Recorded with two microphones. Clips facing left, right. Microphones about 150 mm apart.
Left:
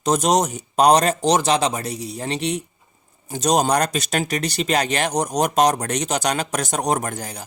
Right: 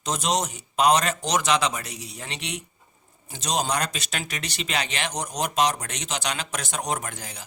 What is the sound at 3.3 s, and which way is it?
A man's voice, 45° left (ahead or behind).